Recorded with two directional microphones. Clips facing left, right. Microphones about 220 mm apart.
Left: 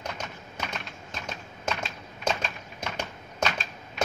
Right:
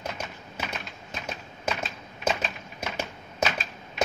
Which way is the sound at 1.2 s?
5° right (ahead or behind).